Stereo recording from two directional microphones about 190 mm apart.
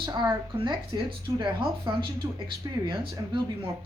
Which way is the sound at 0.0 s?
20° right (ahead or behind).